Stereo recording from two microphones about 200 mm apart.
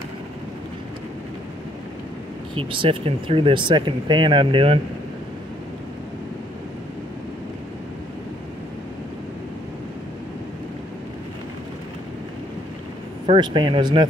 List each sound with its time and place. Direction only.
2.5 s speech: 25° right (ahead or behind)
13.3 s speech: 25° right (ahead or behind)